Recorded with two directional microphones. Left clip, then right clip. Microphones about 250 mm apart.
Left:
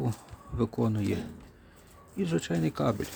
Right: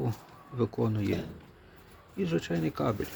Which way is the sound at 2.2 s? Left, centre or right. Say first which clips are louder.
Even; centre.